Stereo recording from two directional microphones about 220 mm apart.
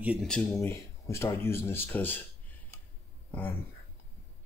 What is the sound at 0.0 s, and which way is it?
Speech, 5° right (ahead or behind).